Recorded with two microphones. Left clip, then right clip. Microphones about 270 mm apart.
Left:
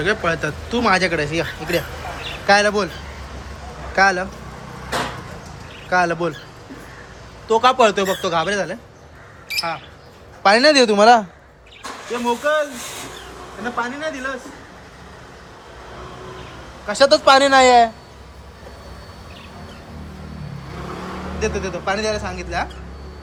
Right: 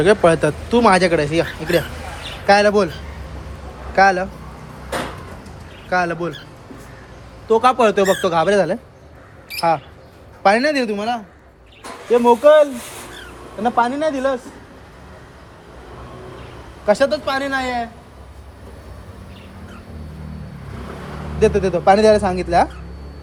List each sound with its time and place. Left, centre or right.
0.0 s speech: centre
3.9 s speech: centre
5.9 s speech: centre
7.4 s speech: centre
10.4 s speech: centre
12.2 s speech: centre
13.7 s speech: centre
17.0 s speech: centre
21.3 s speech: centre